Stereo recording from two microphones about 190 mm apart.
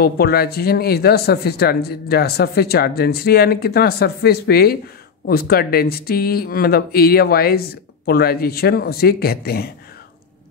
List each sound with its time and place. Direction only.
0.0 s speech: 55° left (ahead or behind)